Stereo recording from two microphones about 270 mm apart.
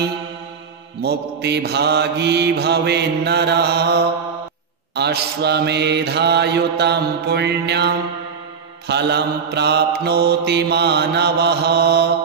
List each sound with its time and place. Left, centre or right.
1.0 s mantra: right